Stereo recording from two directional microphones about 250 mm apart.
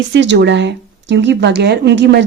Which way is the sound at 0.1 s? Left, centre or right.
Right.